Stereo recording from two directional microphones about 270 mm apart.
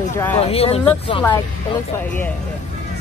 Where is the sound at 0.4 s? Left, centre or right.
Left.